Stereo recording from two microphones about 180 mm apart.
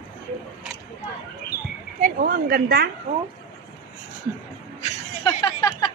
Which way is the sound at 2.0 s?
45° right (ahead or behind).